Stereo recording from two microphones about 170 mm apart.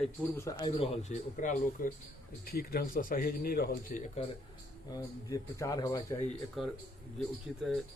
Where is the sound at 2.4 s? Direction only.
65° left (ahead or behind).